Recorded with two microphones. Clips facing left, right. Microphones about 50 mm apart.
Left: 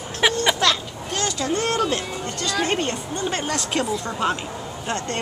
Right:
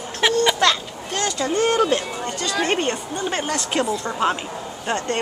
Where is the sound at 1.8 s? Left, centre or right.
Centre.